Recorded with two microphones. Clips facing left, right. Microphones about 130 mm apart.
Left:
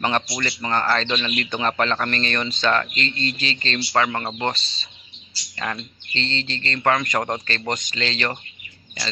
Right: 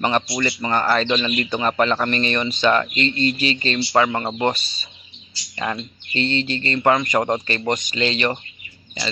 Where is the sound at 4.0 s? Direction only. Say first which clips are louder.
Right 3 dB; 15° right (ahead or behind).